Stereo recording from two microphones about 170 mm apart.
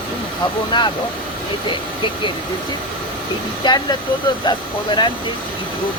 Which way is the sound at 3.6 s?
25° left (ahead or behind).